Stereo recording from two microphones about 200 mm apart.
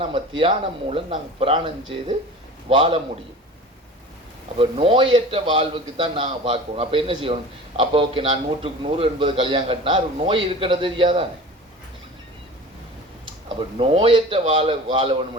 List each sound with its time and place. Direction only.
0.0 s a man's voice: 25° right (ahead or behind)
4.5 s a man's voice: 25° right (ahead or behind)
13.7 s a man's voice: 25° right (ahead or behind)